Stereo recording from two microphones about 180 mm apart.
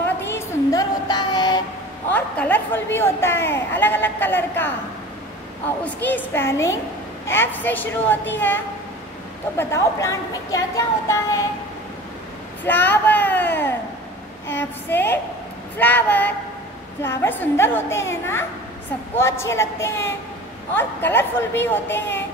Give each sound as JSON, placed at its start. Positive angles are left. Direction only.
{"t": 0.0, "sound": "a sound", "side_deg": 15}
{"t": 2.1, "sound": "a woman's voice", "side_deg": 10}
{"t": 5.9, "sound": "a woman's voice", "side_deg": 10}
{"t": 12.6, "sound": "a woman's voice", "side_deg": 10}